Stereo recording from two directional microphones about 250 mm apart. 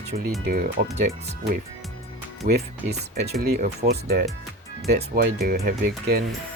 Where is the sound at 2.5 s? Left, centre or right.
Right.